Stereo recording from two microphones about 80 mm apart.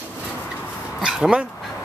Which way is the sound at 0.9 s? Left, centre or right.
Centre.